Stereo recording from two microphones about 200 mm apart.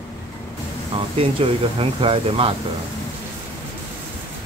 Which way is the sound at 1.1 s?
30° right (ahead or behind).